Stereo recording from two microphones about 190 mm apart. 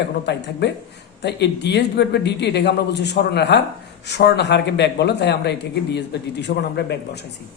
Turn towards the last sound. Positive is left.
turn(degrees=60)  # may be behind; listen again after turning